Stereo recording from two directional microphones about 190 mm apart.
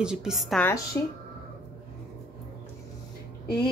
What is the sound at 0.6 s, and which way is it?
Speech, 15° left (ahead or behind).